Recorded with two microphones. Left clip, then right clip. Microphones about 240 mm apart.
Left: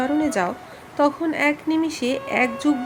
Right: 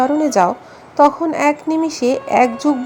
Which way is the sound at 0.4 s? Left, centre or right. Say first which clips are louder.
Right 9 dB; centre.